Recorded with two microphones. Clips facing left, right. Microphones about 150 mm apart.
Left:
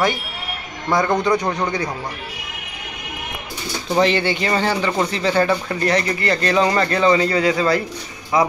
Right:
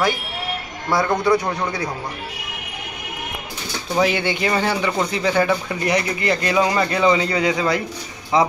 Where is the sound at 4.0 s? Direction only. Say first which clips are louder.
Left 1 dB; 10° right (ahead or behind).